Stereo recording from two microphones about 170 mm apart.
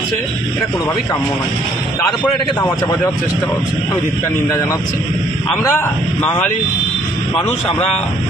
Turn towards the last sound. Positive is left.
turn(degrees=10)  # may be behind; listen again after turning